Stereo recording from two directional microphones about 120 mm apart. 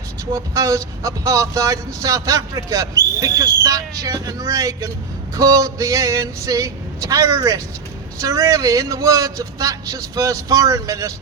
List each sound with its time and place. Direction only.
0.3 s speech: 25° right (ahead or behind)